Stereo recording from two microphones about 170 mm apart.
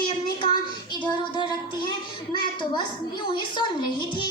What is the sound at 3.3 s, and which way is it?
Speech, 30° left (ahead or behind).